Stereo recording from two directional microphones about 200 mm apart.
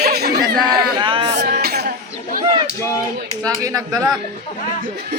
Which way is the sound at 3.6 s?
15° right (ahead or behind).